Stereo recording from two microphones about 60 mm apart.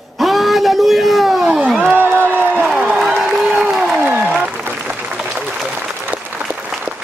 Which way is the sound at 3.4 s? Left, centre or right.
Centre.